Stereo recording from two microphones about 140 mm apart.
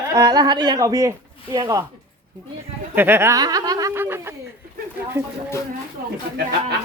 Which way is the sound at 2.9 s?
15° right (ahead or behind).